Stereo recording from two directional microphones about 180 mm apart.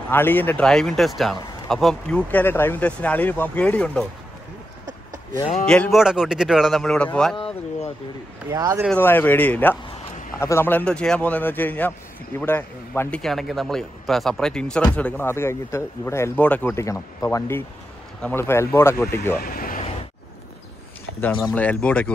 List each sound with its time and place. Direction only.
0.1 s speech: 10° left (ahead or behind)
5.7 s speech: centre (ahead or behind)
7.3 s a sound: 30° left (ahead or behind)
8.5 s speech: 20° right (ahead or behind)
8.9 s speech: 10° left (ahead or behind)
13.2 s speech: centre (ahead or behind)
19.4 s speech: 50° left (ahead or behind)
21.4 s speech: 5° left (ahead or behind)